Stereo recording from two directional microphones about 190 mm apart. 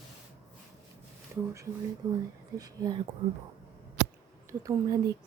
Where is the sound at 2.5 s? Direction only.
20° right (ahead or behind).